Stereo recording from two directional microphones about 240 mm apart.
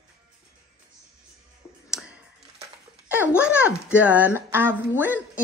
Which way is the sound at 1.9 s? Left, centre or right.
Centre.